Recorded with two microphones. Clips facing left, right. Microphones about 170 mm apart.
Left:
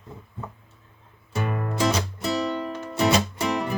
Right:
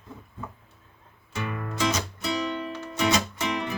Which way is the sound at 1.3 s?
40° left (ahead or behind).